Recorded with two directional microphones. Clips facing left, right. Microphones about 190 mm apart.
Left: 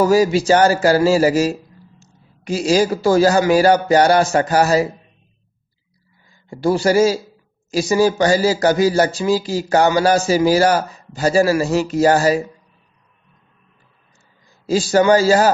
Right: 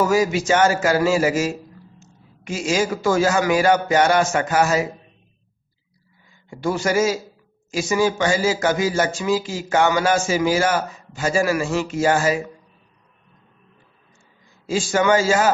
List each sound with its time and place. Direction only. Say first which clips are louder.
0.0 s a man's voice: left 5 dB; 35° left (ahead or behind)
6.5 s a man's voice: left 5 dB; 35° left (ahead or behind)
14.7 s a man's voice: left 5 dB; 35° left (ahead or behind)